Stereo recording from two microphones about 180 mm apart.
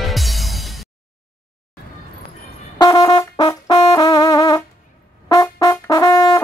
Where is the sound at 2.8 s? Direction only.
20° left (ahead or behind).